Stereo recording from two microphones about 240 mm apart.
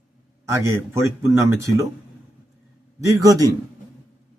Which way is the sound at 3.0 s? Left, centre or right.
Centre.